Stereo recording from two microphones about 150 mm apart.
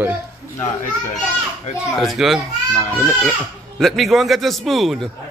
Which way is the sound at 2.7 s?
10° left (ahead or behind).